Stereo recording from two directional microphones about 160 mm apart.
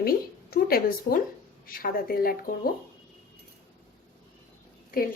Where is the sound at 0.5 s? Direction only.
70° left (ahead or behind).